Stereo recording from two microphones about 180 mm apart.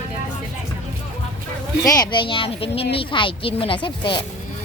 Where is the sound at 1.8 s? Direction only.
20° left (ahead or behind).